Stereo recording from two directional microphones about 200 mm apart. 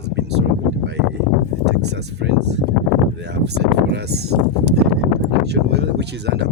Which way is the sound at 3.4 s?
55° right (ahead or behind).